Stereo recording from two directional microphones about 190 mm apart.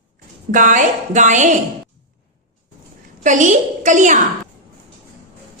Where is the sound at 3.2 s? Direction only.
40° right (ahead or behind).